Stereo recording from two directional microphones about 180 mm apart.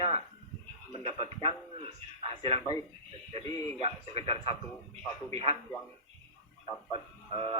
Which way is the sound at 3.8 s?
35° right (ahead or behind).